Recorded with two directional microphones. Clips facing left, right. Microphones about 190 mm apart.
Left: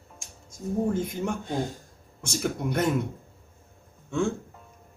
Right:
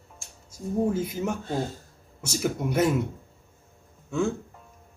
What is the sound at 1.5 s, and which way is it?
Speech, 15° left (ahead or behind).